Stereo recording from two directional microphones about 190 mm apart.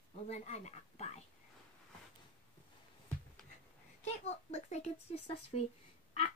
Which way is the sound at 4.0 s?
35° left (ahead or behind).